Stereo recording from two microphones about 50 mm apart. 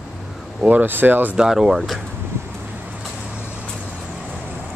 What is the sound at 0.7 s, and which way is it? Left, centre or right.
Speech, right.